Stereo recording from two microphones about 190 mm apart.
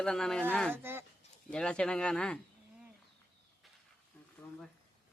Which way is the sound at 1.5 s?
5° left (ahead or behind).